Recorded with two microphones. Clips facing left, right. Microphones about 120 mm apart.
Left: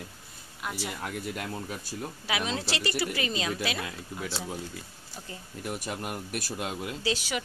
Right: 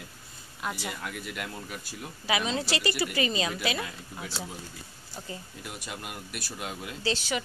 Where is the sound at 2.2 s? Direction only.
Centre (ahead or behind).